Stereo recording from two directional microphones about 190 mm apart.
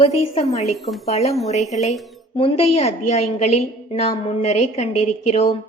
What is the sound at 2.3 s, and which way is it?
A woman's voice, 30° left (ahead or behind).